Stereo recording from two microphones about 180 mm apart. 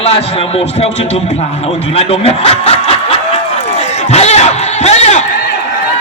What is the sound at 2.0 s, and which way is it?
Speech, 35° left (ahead or behind).